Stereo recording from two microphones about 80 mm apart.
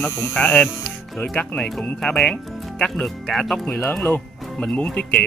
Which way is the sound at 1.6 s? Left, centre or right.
Centre.